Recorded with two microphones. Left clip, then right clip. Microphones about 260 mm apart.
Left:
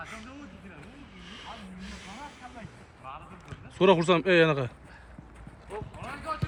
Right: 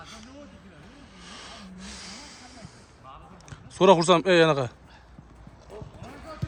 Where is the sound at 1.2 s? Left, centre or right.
Centre.